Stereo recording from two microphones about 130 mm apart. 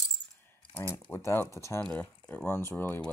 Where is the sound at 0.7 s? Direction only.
15° left (ahead or behind).